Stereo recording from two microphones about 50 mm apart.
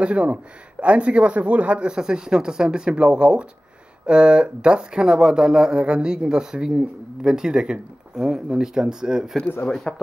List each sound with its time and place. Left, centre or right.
0.0 s a man's voice: right
9.9 s speech: centre